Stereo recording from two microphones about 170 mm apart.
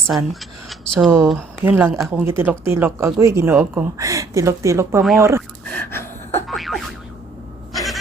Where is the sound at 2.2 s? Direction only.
15° right (ahead or behind).